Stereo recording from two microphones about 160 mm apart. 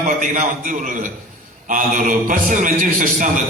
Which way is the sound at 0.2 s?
55° right (ahead or behind).